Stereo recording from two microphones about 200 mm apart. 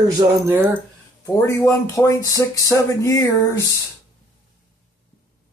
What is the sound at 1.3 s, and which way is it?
Speech, 15° left (ahead or behind).